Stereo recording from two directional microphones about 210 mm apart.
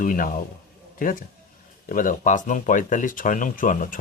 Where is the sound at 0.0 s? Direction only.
40° left (ahead or behind).